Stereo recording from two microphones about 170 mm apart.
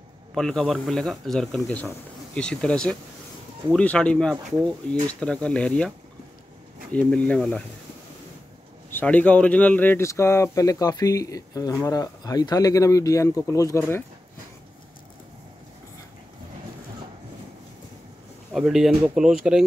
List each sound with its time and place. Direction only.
0.3 s speech: centre (ahead or behind)
8.9 s speech: 10° left (ahead or behind)
18.5 s speech: centre (ahead or behind)